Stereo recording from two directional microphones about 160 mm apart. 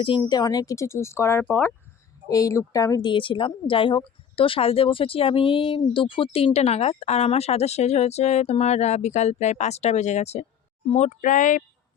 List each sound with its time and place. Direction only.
0.2 s a woman's voice: 25° left (ahead or behind); by 11.6 s 55° left (ahead or behind)